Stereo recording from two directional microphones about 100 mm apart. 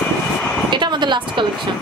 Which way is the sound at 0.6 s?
50° right (ahead or behind).